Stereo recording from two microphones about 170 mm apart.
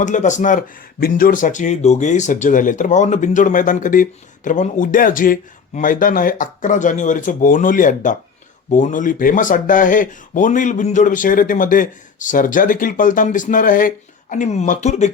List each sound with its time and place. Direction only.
0.0 s speech: 45° left (ahead or behind)